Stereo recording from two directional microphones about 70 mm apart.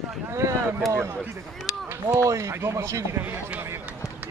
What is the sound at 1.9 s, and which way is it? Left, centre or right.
Speech, right.